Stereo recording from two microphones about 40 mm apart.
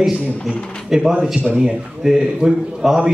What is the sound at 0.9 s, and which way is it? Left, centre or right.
A man's voice, centre.